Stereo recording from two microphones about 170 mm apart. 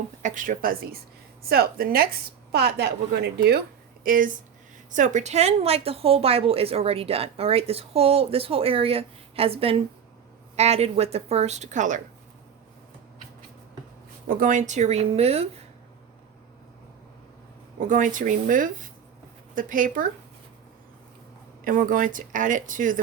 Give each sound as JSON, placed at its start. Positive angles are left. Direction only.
{"t": 0.2, "sound": "a woman's voice", "side_deg": -50}
{"t": 2.5, "sound": "a woman's voice", "side_deg": -70}
{"t": 4.0, "sound": "a woman's voice", "side_deg": -55}
{"t": 14.3, "sound": "a woman's voice", "side_deg": -55}
{"t": 17.7, "sound": "speech", "side_deg": -50}
{"t": 21.6, "sound": "speech", "side_deg": -55}